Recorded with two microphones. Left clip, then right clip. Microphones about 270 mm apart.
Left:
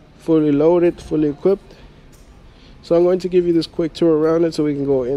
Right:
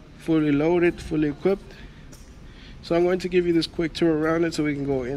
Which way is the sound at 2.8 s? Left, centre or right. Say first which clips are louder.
Left 7 dB; centre.